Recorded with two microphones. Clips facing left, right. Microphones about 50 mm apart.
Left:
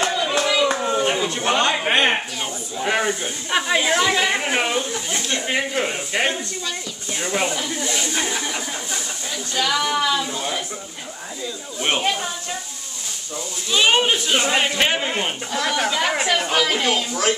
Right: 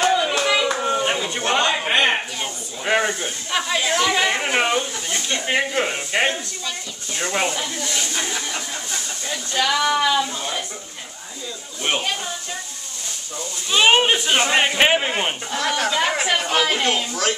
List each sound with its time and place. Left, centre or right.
0.0 s a sound: centre
1.1 s a sound: centre
3.4 s speech: centre
4.1 s speech: centre
7.2 s speech: centre
7.8 s a sound: centre
9.3 s speech: centre
10.2 s speech: centre
13.7 s speech: centre